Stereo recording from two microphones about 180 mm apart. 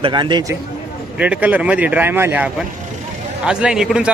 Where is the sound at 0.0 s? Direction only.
25° right (ahead or behind).